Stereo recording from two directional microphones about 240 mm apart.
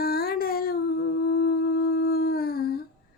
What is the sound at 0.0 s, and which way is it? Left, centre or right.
Humming, left.